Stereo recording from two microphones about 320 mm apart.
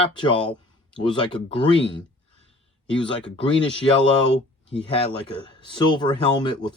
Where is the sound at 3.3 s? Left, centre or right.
Centre.